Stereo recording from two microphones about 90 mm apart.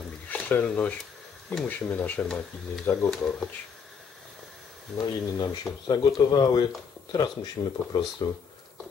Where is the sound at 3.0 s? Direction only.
5° left (ahead or behind).